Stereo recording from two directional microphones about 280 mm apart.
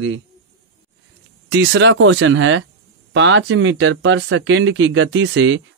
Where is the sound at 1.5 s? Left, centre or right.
Right.